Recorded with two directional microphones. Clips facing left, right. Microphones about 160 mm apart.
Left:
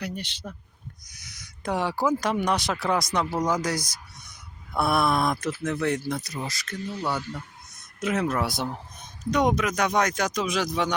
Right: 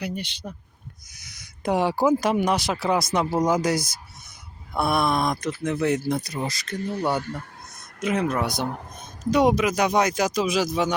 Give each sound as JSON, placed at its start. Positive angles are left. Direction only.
{"t": 0.0, "sound": "speech", "side_deg": 0}
{"t": 4.7, "sound": "speech", "side_deg": 0}
{"t": 6.1, "sound": "speech", "side_deg": -30}
{"t": 6.8, "sound": "speech", "side_deg": -50}
{"t": 7.2, "sound": "fowl", "side_deg": -55}
{"t": 8.0, "sound": "speech", "side_deg": 0}